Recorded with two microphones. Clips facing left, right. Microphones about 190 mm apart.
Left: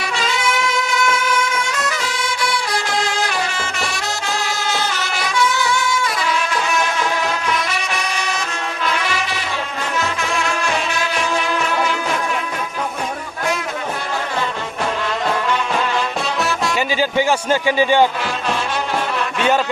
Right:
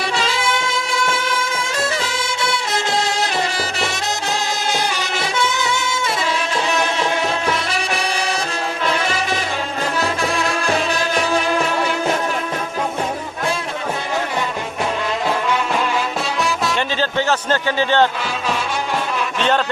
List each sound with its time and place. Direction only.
0.0 s music: 30° right (ahead or behind)
5.2 s music: 25° right (ahead or behind)
7.0 s music: 30° right (ahead or behind)
10.0 s music: 35° right (ahead or behind)
16.4 s music: 5° left (ahead or behind)
19.4 s a man's voice: 10° left (ahead or behind)